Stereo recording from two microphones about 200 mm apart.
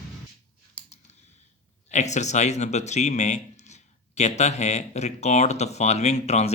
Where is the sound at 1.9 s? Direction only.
35° left (ahead or behind).